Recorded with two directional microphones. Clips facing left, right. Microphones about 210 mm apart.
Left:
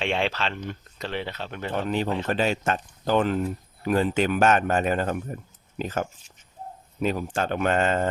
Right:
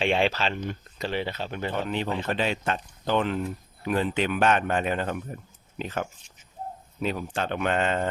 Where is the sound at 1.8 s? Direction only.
40° left (ahead or behind).